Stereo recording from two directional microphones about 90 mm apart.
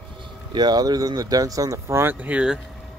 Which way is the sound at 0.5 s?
50° right (ahead or behind).